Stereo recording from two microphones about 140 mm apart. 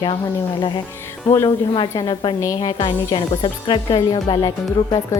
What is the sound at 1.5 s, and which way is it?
A woman's voice, 35° left (ahead or behind).